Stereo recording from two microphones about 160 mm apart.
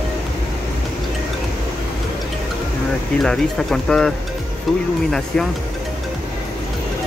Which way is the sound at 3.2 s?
5° left (ahead or behind).